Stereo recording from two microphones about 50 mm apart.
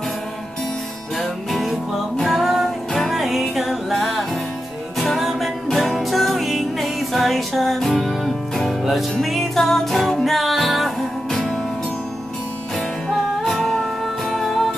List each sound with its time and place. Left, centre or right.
1.1 s music: centre
12.7 s music: centre